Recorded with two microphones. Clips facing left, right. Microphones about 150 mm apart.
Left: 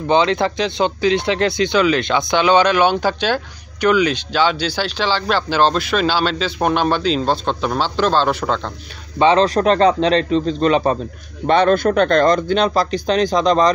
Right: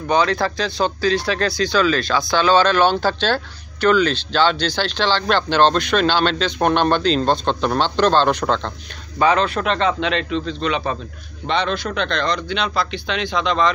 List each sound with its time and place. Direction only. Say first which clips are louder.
0.1 s speech: left 2 dB; 20° left (ahead or behind); by 8.7 s 5° left (ahead or behind)
9.2 s a man's voice: left 4 dB; 30° left (ahead or behind)